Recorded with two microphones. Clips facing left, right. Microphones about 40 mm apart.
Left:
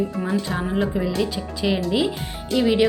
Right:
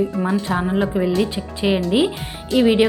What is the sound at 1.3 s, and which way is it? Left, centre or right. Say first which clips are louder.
Speech: right 3 dB; right.